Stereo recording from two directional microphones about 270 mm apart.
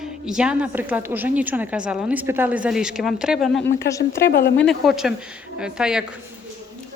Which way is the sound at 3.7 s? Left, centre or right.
Centre.